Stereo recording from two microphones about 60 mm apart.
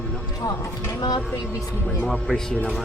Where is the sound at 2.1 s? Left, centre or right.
Centre.